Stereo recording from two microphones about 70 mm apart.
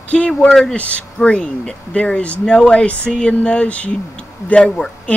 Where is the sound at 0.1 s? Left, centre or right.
Centre.